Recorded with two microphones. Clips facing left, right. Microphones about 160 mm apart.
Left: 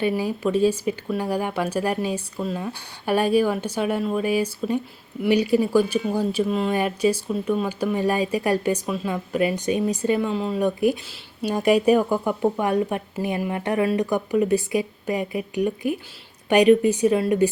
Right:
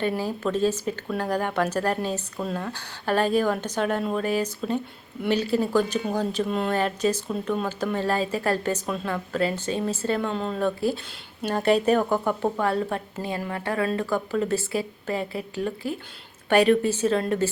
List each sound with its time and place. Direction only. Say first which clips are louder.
0.0 s speech: left 3 dB; 10° left (ahead or behind)